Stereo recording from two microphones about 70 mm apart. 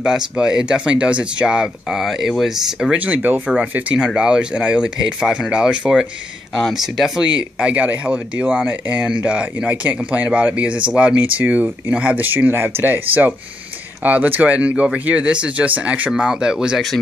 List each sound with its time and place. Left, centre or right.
0.0 s speech: centre
3.0 s speech: right
3.9 s speech: centre
7.2 s speech: centre
16.1 s speech: centre